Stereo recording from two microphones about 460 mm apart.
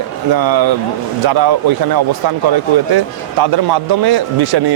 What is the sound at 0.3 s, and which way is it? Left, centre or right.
Speech, right.